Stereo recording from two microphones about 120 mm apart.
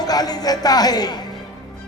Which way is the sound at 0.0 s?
35° left (ahead or behind).